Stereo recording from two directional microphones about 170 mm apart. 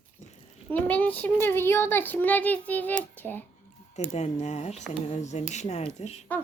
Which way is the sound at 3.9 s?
40° left (ahead or behind).